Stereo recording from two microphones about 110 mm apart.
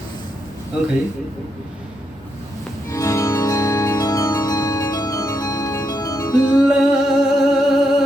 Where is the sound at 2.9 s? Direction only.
25° left (ahead or behind).